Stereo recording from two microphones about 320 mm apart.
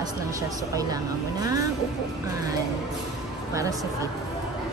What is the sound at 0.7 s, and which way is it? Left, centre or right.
Speech, centre.